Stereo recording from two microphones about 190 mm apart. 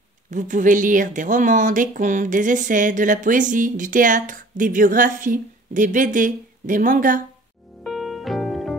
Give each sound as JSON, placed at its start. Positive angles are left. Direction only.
{"t": 0.3, "sound": "speech", "side_deg": -40}
{"t": 7.8, "sound": "music", "side_deg": 0}